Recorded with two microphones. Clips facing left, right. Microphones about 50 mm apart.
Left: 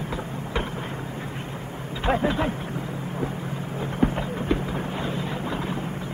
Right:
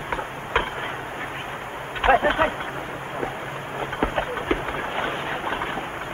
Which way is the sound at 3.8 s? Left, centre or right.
Right.